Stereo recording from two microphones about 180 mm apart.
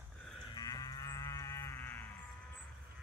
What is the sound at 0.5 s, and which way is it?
Livestock, 20° left (ahead or behind).